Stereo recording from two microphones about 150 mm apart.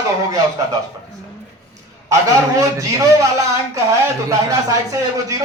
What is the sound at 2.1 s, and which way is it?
Speech, 20° right (ahead or behind).